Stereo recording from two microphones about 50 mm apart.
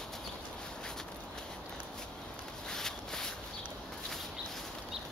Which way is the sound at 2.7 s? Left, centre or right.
Centre.